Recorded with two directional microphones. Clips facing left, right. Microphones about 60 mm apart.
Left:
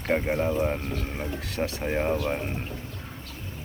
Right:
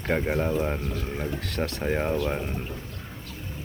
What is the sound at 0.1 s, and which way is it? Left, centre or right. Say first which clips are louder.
Speech: even; centre.